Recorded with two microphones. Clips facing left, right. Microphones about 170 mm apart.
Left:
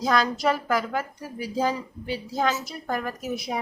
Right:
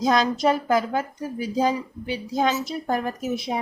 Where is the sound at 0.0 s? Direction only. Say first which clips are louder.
Right 3 dB; 20° right (ahead or behind).